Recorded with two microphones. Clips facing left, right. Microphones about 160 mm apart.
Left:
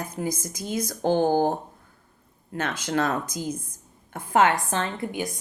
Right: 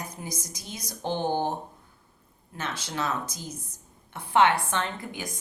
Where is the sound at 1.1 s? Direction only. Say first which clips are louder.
Left 6 dB; 90° left.